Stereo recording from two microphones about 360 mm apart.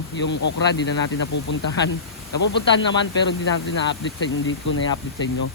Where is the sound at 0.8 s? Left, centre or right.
Left.